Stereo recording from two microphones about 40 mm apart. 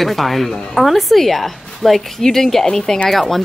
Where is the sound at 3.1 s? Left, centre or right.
Centre.